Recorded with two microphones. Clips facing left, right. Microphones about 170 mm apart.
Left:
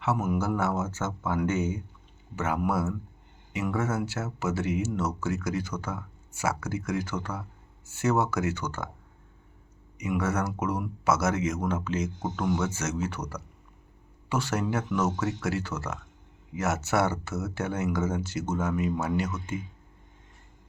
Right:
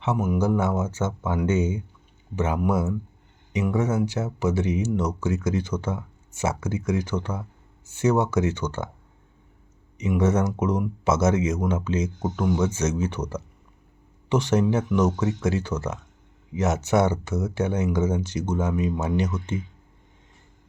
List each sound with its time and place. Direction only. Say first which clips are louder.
0.0 s speech: right 4 dB; 15° right (ahead or behind)
10.0 s speech: right 6 dB; 20° right (ahead or behind)